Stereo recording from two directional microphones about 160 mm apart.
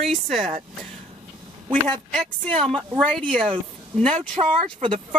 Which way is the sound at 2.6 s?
30° right (ahead or behind).